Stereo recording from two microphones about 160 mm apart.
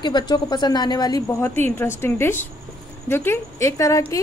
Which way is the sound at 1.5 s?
15° left (ahead or behind).